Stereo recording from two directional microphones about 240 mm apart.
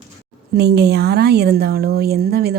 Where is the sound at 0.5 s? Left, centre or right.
Right.